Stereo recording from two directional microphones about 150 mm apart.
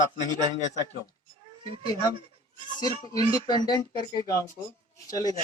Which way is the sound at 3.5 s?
30° left (ahead or behind).